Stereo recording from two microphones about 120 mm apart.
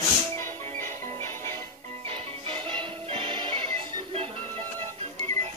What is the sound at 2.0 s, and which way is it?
Music, 55° right (ahead or behind).